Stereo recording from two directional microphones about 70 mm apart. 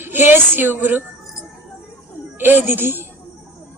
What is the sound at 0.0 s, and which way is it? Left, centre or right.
A woman's voice, right.